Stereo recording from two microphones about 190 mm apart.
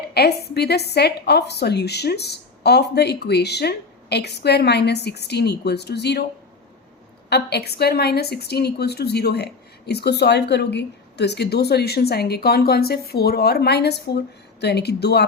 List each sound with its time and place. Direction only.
0.1 s a woman's voice: 60° left (ahead or behind)
7.3 s a woman's voice: 60° left (ahead or behind)